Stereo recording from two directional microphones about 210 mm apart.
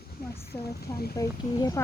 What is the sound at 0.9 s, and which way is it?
Speech, 45° left (ahead or behind).